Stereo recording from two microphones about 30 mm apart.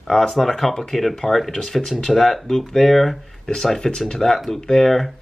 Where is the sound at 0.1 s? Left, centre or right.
Centre.